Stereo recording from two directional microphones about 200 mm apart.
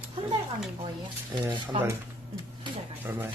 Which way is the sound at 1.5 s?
20° right (ahead or behind).